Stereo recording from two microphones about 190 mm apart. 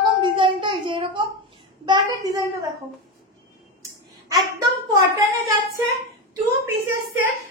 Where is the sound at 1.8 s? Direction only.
20° right (ahead or behind).